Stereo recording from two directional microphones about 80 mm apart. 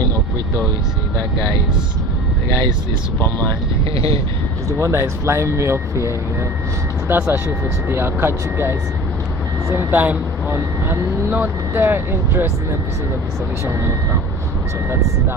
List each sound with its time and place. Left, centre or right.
3.2 s speech: right
4.8 s speech: right
7.1 s speech: right
13.7 s speech: right